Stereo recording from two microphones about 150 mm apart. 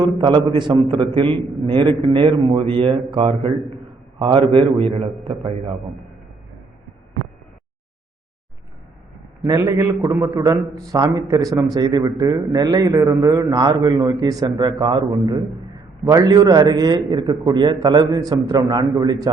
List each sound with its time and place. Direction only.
0.2 s a man's voice: 30° right (ahead or behind)
5.3 s a man's voice: centre (ahead or behind)
9.5 s a man's voice: 20° right (ahead or behind)